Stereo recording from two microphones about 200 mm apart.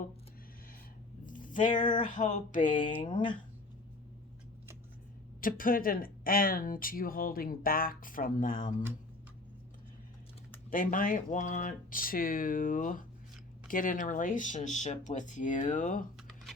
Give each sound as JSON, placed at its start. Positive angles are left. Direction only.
{"t": 1.2, "sound": "a sound", "side_deg": 40}
{"t": 1.9, "sound": "speech", "side_deg": 40}
{"t": 5.4, "sound": "speech", "side_deg": 45}
{"t": 10.7, "sound": "speech", "side_deg": 40}